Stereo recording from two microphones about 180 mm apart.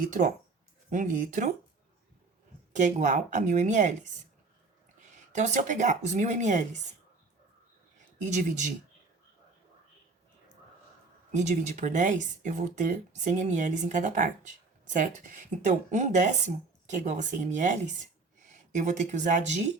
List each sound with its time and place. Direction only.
0.0 s speech: 45° right (ahead or behind)
2.7 s speech: 45° right (ahead or behind)
5.3 s speech: 40° right (ahead or behind)
8.2 s speech: 45° right (ahead or behind)
11.3 s speech: 40° right (ahead or behind)